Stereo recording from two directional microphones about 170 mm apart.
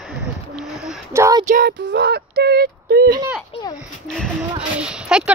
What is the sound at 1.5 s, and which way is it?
Female singing, 75° right (ahead or behind).